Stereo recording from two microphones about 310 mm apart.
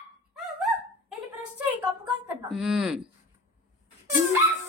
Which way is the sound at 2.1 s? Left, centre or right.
Centre.